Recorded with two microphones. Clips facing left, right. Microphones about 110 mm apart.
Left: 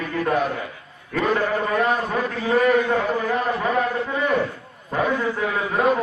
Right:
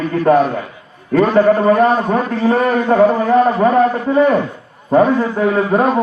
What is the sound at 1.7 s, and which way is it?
Speech, 30° right (ahead or behind).